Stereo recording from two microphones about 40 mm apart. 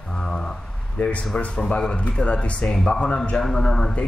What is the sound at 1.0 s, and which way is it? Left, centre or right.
Speech, left.